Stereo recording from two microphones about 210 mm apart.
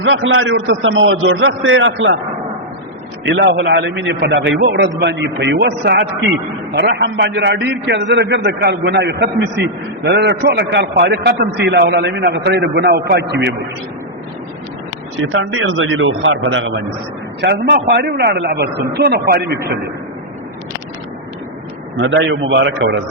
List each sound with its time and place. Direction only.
0.0 s a man's voice: 65° right (ahead or behind)
3.3 s a man's voice: 55° right (ahead or behind)
15.3 s a man's voice: 65° right (ahead or behind)
17.4 s a man's voice: 50° right (ahead or behind)
21.9 s a man's voice: 60° right (ahead or behind)